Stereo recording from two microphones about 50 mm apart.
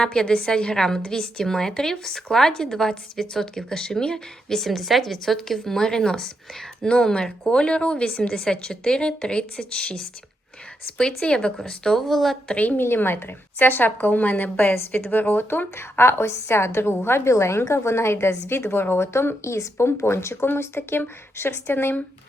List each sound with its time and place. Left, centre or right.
0.0 s a woman's voice: centre
12.5 s a woman's voice: left
12.8 s a woman's voice: left
19.5 s a woman's voice: left
20.5 s a woman's voice: left